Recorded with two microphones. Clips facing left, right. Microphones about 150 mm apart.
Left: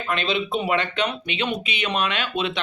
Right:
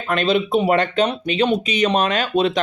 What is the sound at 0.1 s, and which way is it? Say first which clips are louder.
A man's voice: right 7 dB; 45° right (ahead or behind).